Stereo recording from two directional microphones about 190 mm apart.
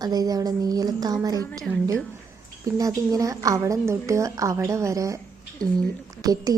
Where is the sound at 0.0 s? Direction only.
20° right (ahead or behind).